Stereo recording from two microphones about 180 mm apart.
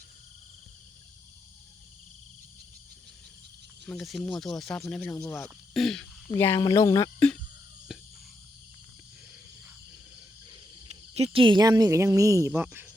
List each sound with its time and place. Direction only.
3.8 s speech: centre (ahead or behind)
5.7 s speech: centre (ahead or behind)
6.3 s speech: 15° left (ahead or behind)
7.9 s a sound: 5° right (ahead or behind)
10.5 s cricket: 35° right (ahead or behind); by 12.9 s 10° right (ahead or behind)